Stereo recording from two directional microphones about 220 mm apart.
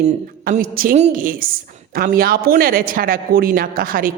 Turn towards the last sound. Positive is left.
turn(degrees=-40)  # may be behind; listen again after turning